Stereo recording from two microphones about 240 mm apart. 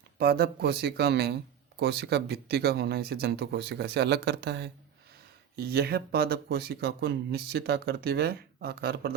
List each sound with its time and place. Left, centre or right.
0.2 s speech: right